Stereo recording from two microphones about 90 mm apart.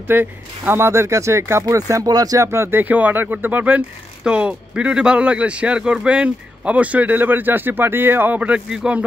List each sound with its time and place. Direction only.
0.1 s speech: 25° right (ahead or behind)
8.4 s speech: 10° right (ahead or behind)